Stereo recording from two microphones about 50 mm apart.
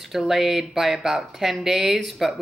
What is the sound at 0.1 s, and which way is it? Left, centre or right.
Speech, centre.